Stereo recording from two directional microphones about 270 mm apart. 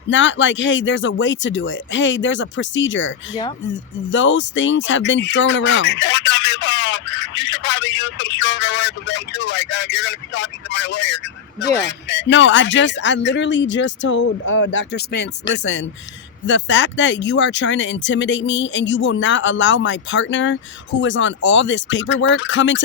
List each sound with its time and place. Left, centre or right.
0.1 s speech: left
4.1 s speech: left